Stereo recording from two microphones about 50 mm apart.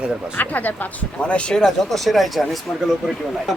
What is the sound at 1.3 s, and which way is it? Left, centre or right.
Speech, left.